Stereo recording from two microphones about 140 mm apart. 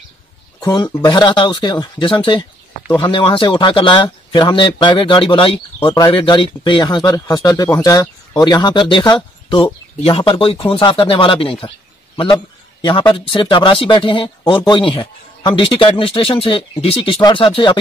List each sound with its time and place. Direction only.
0.6 s speech: 30° left (ahead or behind)
12.8 s speech: 35° left (ahead or behind)